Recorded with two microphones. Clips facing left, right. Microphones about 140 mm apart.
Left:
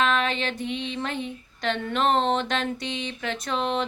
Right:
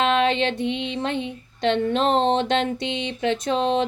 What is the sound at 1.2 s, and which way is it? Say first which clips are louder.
Speech: right 6 dB; 25° right (ahead or behind).